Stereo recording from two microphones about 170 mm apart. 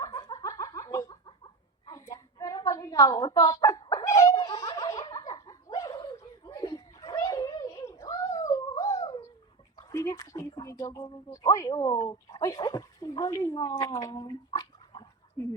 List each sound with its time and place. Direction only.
0.0 s snicker: 20° left (ahead or behind)
1.9 s a sound: 20° left (ahead or behind)
10.9 s speech: 25° left (ahead or behind)